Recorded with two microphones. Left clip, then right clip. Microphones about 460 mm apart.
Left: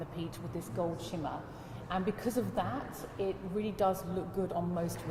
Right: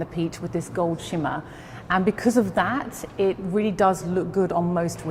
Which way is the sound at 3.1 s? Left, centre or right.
Right.